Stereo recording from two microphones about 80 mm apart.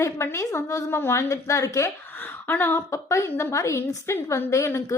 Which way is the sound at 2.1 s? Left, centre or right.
Left.